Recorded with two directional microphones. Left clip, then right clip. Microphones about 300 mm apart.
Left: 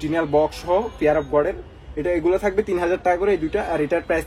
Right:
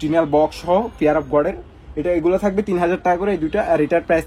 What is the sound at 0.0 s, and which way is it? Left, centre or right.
A man's voice, centre.